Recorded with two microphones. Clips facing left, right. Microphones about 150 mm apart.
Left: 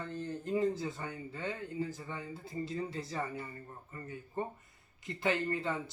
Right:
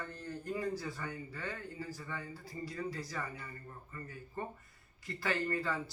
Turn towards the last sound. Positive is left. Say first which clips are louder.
# left 1 dB
turn(degrees=20)  # may be behind; listen again after turning